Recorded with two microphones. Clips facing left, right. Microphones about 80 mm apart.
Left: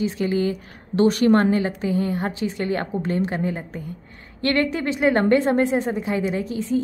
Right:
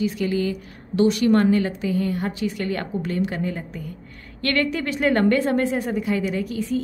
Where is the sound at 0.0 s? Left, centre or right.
Left.